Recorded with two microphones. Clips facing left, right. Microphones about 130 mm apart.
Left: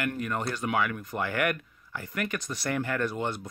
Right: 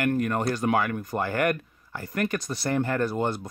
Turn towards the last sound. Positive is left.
turn(degrees=-40)  # may be behind; listen again after turning